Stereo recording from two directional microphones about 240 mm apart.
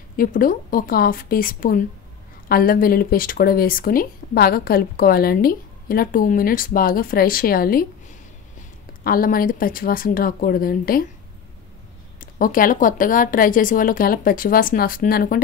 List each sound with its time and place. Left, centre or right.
0.2 s speech: left
9.0 s speech: left
12.2 s speech: left